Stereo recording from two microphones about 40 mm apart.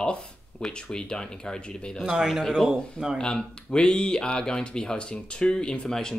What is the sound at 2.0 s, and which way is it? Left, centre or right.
Speech, centre.